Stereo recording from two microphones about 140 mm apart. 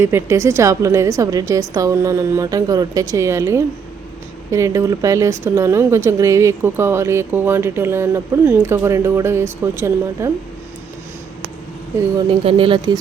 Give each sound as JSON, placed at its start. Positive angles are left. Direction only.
{"t": 0.0, "sound": "speech", "side_deg": -20}
{"t": 12.3, "sound": "speech", "side_deg": -40}